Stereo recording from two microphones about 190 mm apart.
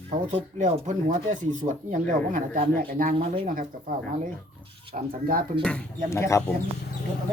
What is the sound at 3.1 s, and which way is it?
Speech, 30° right (ahead or behind).